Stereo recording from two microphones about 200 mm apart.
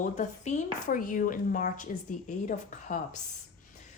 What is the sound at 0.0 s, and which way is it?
Speech, 35° left (ahead or behind).